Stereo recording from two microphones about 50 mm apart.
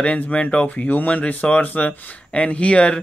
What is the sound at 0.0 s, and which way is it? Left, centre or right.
Speech, left.